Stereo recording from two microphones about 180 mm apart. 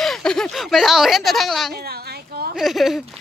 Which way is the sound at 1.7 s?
60° right (ahead or behind).